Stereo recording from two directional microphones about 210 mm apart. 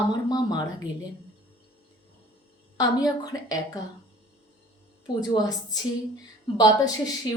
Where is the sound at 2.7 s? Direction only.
15° left (ahead or behind).